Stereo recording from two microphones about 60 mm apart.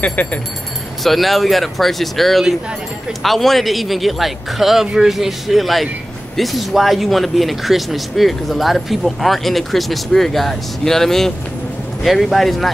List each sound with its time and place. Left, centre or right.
0.0 s speech: left
1.0 s speech: centre